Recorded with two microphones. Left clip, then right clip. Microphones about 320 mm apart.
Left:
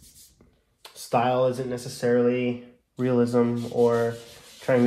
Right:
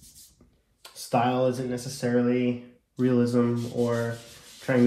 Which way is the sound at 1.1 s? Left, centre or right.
Left.